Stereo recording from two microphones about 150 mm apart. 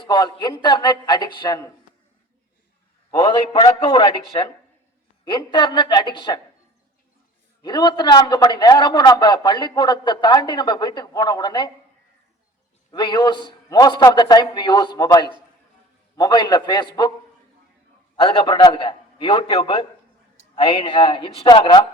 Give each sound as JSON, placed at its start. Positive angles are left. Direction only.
{"t": 0.0, "sound": "a man's voice", "side_deg": 30}
{"t": 3.2, "sound": "a man's voice", "side_deg": 30}
{"t": 7.6, "sound": "a man's voice", "side_deg": 30}
{"t": 12.9, "sound": "a man's voice", "side_deg": 30}
{"t": 18.2, "sound": "a man's voice", "side_deg": 35}